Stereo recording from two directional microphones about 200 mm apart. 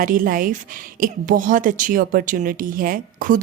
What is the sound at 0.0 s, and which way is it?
A woman's voice, 45° right (ahead or behind).